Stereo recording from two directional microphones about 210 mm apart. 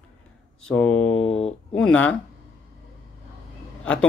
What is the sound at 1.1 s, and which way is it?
Speech, 30° left (ahead or behind).